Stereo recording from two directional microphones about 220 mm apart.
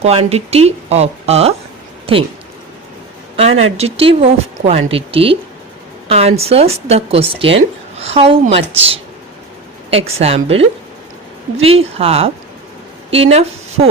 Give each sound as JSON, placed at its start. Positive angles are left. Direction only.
{"t": 0.0, "sound": "speech", "side_deg": -25}
{"t": 3.3, "sound": "speech", "side_deg": -25}